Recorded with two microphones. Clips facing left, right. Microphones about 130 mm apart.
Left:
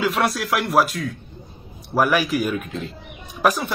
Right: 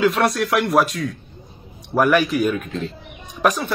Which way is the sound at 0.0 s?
Centre (ahead or behind).